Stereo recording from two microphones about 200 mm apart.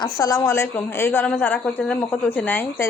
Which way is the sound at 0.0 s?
15° left (ahead or behind).